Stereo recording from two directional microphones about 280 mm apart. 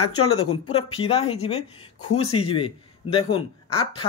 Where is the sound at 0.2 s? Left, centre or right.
Centre.